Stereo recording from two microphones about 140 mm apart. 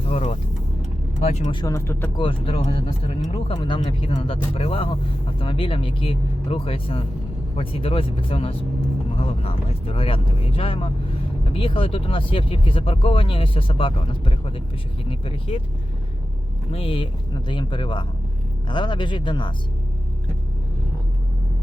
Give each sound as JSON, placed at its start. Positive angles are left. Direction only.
{"t": 0.0, "sound": "speech", "side_deg": 50}
{"t": 1.5, "sound": "speech", "side_deg": 25}
{"t": 2.1, "sound": "speech", "side_deg": 35}
{"t": 16.7, "sound": "speech", "side_deg": 40}